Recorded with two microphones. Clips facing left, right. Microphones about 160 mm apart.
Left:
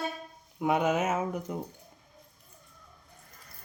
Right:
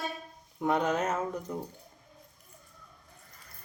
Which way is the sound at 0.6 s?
10° left (ahead or behind).